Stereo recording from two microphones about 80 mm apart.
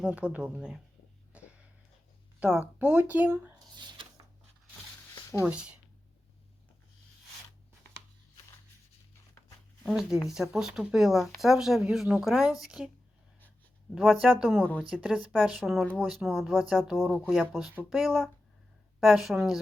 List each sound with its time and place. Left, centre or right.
0.1 s speech: centre
1.3 s a sound: centre
2.4 s speech: centre
5.5 s speech: centre
9.8 s speech: centre
13.9 s speech: centre
14.6 s a woman's voice: centre
15.0 s speech: centre